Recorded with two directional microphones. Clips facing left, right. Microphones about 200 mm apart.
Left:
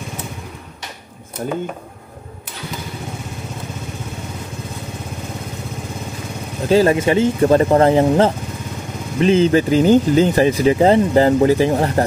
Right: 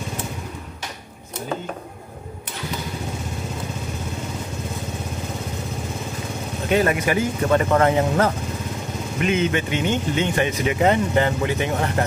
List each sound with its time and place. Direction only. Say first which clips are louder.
6.7 s speech: left 6 dB; 30° left (ahead or behind)